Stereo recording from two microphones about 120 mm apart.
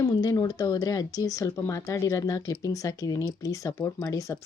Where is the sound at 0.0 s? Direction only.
30° left (ahead or behind).